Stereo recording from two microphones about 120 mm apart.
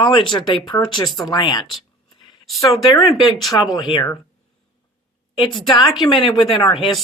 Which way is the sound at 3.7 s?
40° left (ahead or behind).